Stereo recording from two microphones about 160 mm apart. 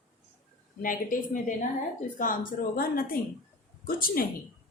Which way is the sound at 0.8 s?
60° left (ahead or behind).